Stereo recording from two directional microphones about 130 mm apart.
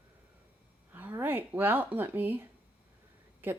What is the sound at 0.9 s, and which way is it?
Speech, 15° right (ahead or behind).